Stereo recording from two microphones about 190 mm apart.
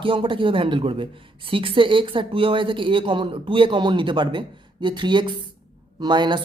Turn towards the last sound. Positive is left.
turn(degrees=-25)  # may be behind; listen again after turning